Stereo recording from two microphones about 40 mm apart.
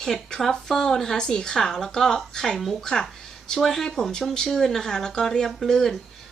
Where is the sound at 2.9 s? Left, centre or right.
Centre.